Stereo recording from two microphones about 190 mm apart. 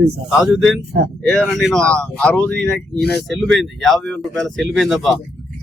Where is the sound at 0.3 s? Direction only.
Centre (ahead or behind).